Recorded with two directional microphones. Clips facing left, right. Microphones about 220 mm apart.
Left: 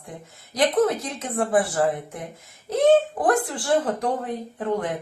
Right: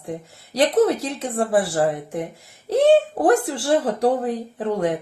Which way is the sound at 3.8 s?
30° right (ahead or behind).